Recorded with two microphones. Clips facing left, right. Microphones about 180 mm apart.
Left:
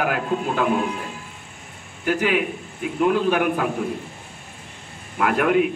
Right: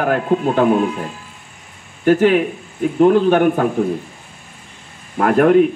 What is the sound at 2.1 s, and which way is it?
A man's voice, 40° right (ahead or behind).